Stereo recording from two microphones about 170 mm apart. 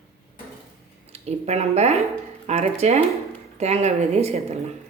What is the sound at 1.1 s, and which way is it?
A woman's voice, 40° right (ahead or behind).